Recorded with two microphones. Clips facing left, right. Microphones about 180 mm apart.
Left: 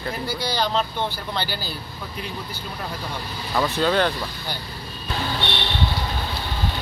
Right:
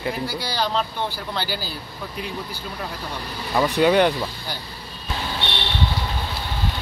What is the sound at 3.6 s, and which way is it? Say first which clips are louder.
Speech: right 4 dB; 15° right (ahead or behind).